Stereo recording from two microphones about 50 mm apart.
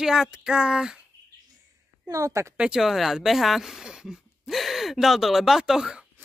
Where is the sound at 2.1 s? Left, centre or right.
Right.